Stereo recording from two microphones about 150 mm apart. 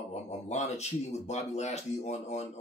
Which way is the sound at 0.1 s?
50° left (ahead or behind).